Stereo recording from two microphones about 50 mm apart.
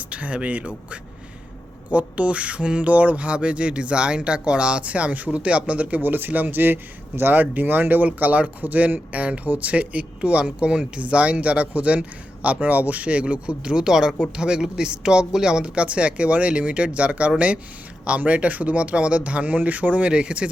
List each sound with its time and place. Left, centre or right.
0.1 s speech: right
1.9 s speech: right